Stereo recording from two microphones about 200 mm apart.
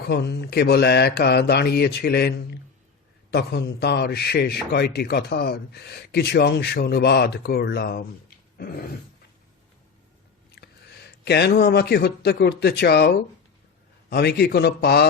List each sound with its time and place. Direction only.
0.0 s a man's voice: 55° left (ahead or behind)
3.3 s a man's voice: 55° left (ahead or behind)
10.6 s a sound: 55° left (ahead or behind)
11.3 s a man's voice: 55° left (ahead or behind)